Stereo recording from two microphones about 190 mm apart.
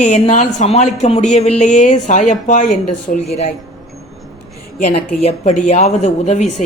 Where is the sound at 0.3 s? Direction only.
35° left (ahead or behind).